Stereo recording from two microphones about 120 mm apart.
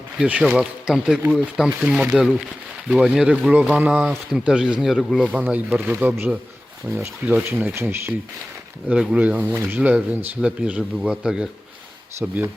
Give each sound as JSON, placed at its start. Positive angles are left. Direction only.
{"t": 0.2, "sound": "speech", "side_deg": -10}
{"t": 5.3, "sound": "speech", "side_deg": -15}
{"t": 8.9, "sound": "speech", "side_deg": -10}